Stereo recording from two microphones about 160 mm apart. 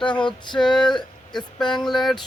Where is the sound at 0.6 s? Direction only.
15° left (ahead or behind).